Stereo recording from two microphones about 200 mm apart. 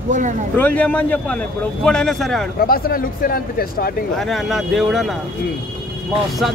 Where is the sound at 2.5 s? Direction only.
45° left (ahead or behind).